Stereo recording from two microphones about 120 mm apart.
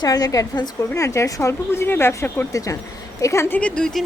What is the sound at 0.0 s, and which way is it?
A woman's voice, 30° left (ahead or behind).